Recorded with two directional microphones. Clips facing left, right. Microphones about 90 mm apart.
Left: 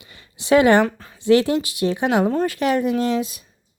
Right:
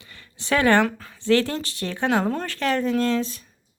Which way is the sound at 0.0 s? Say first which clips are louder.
Left 1 dB; 15° left (ahead or behind).